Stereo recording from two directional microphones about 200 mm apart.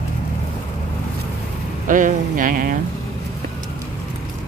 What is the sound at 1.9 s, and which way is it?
Speech, 40° right (ahead or behind).